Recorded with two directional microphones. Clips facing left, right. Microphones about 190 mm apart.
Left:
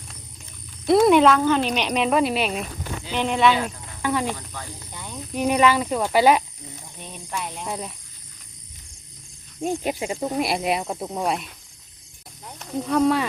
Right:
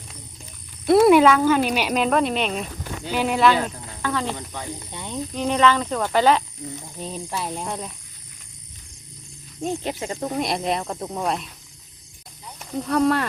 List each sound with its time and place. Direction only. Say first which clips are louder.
0.9 s speech: right 1 dB; 5° right (ahead or behind)
3.1 s speech: right 1 dB; 5° right (ahead or behind)
4.0 s speech: left 2 dB; 15° left (ahead or behind)
4.4 s speech: right 5 dB; 20° right (ahead or behind)
5.3 s speech: left 1 dB; 10° left (ahead or behind)
7.0 s speech: right 3 dB; 30° right (ahead or behind)
7.7 s speech: even; 5° left (ahead or behind)
9.6 s speech: left 2 dB; 10° left (ahead or behind)
12.8 s speech: even; centre (ahead or behind)